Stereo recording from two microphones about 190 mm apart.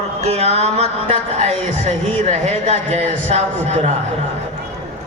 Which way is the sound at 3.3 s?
40° right (ahead or behind).